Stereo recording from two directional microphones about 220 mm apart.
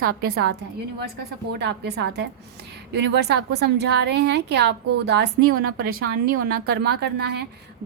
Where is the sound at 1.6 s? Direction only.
50° right (ahead or behind).